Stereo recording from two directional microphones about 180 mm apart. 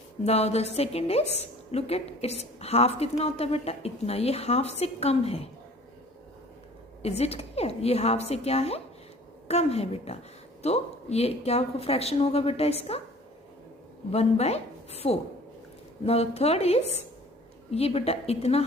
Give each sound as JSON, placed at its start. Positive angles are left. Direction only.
{"t": 0.3, "sound": "a woman's voice", "side_deg": 35}
{"t": 7.0, "sound": "a woman's voice", "side_deg": 35}
{"t": 14.1, "sound": "a woman's voice", "side_deg": 35}